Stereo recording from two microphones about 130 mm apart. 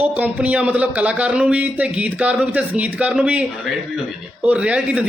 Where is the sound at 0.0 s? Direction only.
10° right (ahead or behind).